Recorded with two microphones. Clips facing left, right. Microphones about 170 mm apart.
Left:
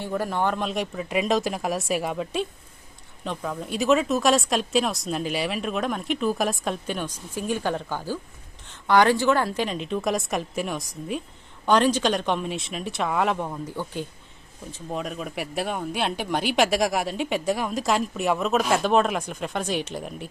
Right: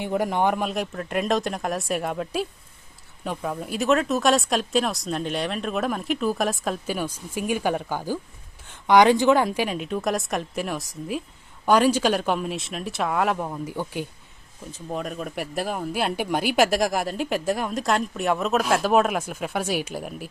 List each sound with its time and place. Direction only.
0.0 s speech: 15° right (ahead or behind)
0.7 s speech: centre (ahead or behind)
14.7 s speech: centre (ahead or behind)